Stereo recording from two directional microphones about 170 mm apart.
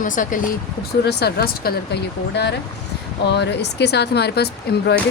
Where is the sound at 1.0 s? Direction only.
70° left (ahead or behind).